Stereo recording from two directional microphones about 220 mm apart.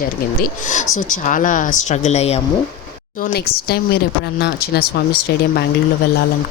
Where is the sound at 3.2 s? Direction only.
45° left (ahead or behind).